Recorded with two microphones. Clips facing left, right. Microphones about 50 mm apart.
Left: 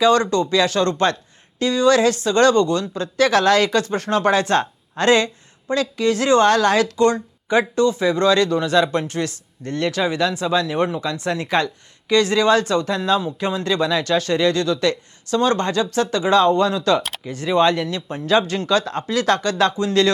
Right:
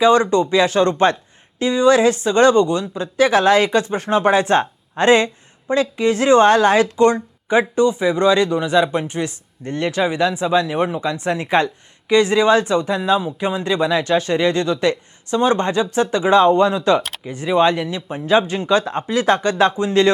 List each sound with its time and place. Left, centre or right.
0.0 s speech: right